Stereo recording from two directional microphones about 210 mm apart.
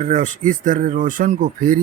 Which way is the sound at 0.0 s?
35° right (ahead or behind).